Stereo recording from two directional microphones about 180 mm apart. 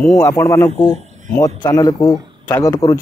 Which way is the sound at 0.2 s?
15° left (ahead or behind).